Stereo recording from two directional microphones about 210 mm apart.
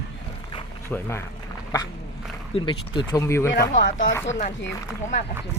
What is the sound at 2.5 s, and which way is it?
Speech, 25° left (ahead or behind).